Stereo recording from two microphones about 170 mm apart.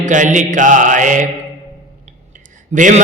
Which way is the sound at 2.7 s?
50° right (ahead or behind).